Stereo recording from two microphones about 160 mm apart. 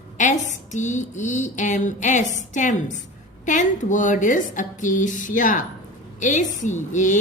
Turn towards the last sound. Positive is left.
turn(degrees=50)  # may be behind; listen again after turning